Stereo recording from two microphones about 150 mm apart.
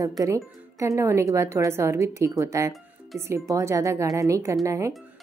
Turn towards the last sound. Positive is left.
turn(degrees=-20)  # may be behind; listen again after turning